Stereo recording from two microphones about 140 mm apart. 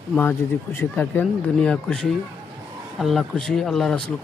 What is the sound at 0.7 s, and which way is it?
Speech, 15° left (ahead or behind).